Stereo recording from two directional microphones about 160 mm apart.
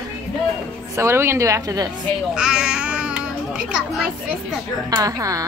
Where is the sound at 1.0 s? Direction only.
15° right (ahead or behind).